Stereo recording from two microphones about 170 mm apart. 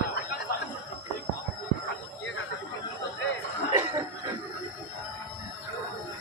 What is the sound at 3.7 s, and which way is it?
Chuckle, 15° right (ahead or behind).